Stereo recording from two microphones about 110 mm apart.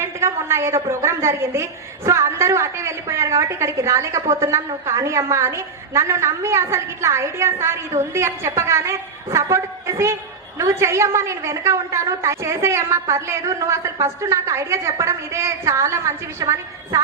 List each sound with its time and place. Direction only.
0.0 s a woman's voice: 25° right (ahead or behind)